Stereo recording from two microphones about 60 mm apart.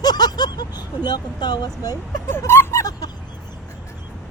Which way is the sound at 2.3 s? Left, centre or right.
Left.